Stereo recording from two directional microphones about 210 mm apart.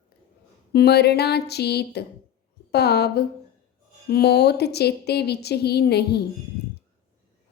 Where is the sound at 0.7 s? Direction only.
50° left (ahead or behind).